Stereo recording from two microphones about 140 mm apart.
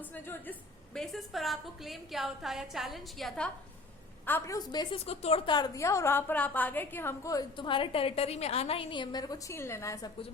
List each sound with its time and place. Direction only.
0.0 s a woman's voice: 15° left (ahead or behind)
0.9 s a woman's voice: centre (ahead or behind)
4.3 s a woman's voice: 15° left (ahead or behind)
4.5 s a woman's voice: 30° left (ahead or behind)
4.9 s a woman's voice: 45° left (ahead or behind)
5.5 s a woman's voice: 25° left (ahead or behind)